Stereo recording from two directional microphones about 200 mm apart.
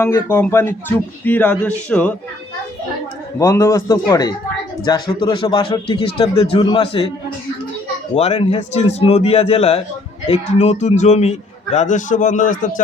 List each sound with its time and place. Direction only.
0.0 s speech: 10° left (ahead or behind)
3.3 s speech: 15° left (ahead or behind)
8.1 s a man's voice: 30° left (ahead or behind)